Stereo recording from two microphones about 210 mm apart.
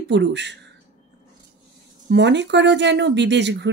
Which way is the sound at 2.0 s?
55° right (ahead or behind).